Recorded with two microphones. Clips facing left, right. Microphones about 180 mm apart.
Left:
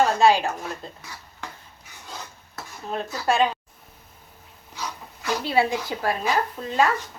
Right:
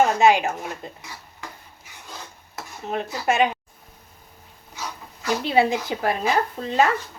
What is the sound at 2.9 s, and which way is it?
Speech, 20° right (ahead or behind).